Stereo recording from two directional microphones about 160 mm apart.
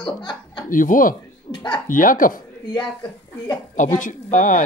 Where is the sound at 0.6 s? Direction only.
55° left (ahead or behind).